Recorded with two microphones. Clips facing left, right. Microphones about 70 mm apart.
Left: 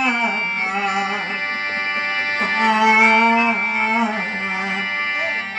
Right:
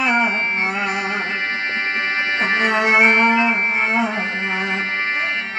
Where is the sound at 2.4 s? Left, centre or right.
Right.